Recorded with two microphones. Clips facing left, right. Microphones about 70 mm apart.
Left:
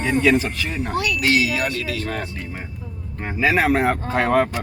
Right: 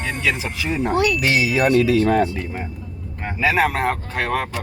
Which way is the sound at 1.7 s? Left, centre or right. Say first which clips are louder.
Right 10 dB; right.